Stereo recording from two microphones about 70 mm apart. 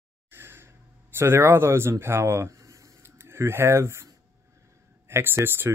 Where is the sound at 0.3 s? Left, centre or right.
Right.